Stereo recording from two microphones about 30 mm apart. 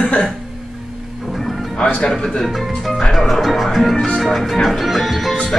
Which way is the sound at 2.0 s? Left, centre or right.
Centre.